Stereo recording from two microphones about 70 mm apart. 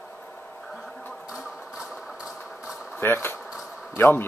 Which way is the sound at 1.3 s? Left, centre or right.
Centre.